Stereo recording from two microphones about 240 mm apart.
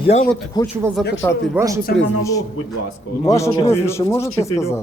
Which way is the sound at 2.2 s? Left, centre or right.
Centre.